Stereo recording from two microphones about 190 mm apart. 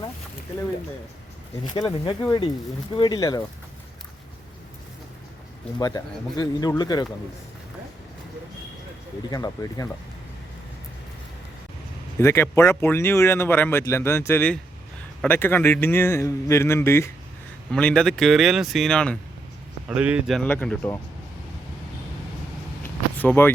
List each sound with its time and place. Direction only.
1.7 s speech: 20° left (ahead or behind)
5.8 s speech: 20° left (ahead or behind)
9.3 s speech: 20° left (ahead or behind)
12.2 s speech: 15° left (ahead or behind)
19.9 s speech: 5° right (ahead or behind)
22.8 s vehicle: 10° left (ahead or behind)